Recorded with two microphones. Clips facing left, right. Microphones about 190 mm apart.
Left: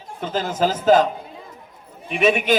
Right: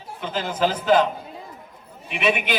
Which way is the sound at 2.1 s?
45° left (ahead or behind).